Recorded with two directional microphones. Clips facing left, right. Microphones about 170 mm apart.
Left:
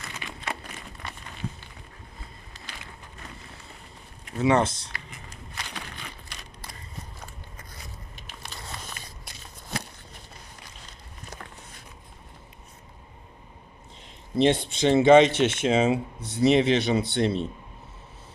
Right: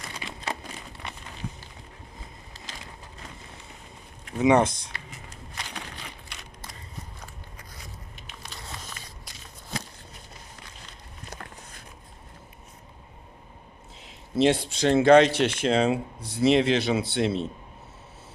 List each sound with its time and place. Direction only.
0.2 s crumpling: 25° right (ahead or behind)
4.4 s speech: 15° right (ahead or behind)
8.4 s biting: 70° left (ahead or behind)
14.0 s speech: centre (ahead or behind)